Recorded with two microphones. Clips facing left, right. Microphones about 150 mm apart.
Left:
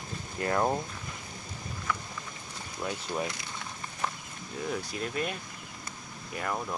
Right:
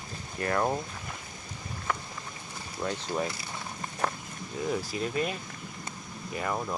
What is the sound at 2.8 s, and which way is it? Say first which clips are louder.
Speech: right 2 dB; centre (ahead or behind).